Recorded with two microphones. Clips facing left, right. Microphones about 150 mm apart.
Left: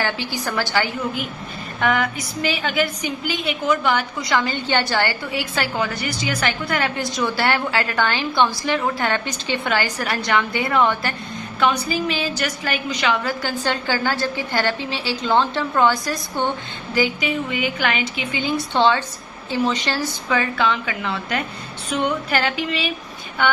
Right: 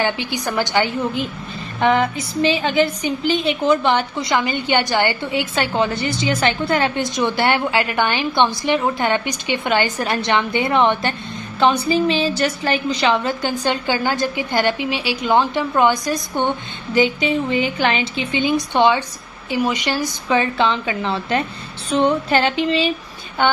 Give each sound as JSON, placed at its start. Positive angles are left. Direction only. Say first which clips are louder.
{"t": 0.0, "sound": "a woman's voice", "louder": "right 3 dB", "side_deg": -20}